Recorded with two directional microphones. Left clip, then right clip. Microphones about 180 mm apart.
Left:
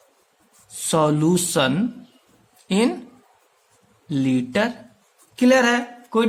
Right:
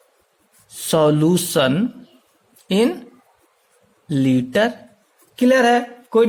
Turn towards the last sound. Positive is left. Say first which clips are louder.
# right 5 dB
turn(degrees=-25)  # may be behind; listen again after turning